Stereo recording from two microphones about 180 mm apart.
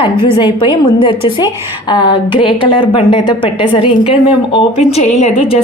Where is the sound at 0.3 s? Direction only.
25° left (ahead or behind).